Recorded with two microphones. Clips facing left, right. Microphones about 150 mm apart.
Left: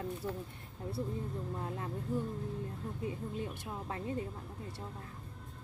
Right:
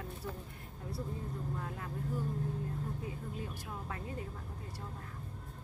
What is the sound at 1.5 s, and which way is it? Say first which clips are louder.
Speech: left 3 dB; 30° left (ahead or behind).